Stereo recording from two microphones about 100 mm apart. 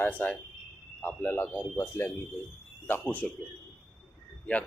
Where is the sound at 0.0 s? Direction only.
15° left (ahead or behind).